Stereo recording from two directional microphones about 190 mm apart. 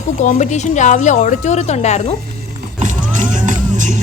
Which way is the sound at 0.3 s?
40° left (ahead or behind).